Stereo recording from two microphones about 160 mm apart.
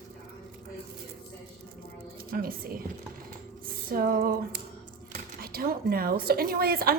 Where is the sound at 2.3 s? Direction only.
65° right (ahead or behind).